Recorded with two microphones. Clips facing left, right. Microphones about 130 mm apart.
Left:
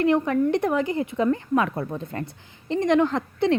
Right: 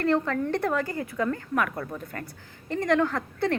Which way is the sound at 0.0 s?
15° left (ahead or behind).